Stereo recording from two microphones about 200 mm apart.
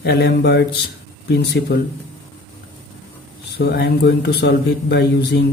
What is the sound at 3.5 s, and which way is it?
Speech, 55° left (ahead or behind).